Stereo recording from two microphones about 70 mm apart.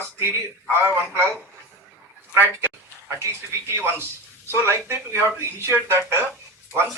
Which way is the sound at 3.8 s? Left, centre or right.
Right.